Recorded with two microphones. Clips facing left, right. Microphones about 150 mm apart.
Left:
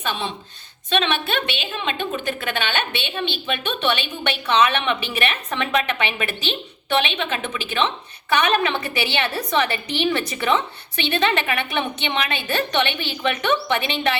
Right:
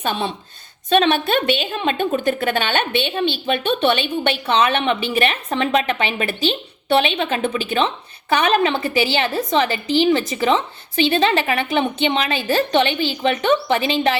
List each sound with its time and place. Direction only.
0.0 s a woman's voice: 40° right (ahead or behind)
9.3 s a woman's voice: 25° right (ahead or behind)